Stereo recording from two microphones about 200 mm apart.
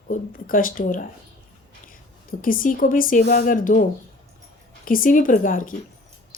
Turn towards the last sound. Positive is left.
turn(degrees=40)  # may be behind; listen again after turning